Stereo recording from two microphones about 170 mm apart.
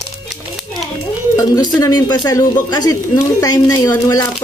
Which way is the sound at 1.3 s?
25° left (ahead or behind).